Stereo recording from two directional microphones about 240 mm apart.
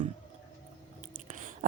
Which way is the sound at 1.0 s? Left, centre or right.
Right.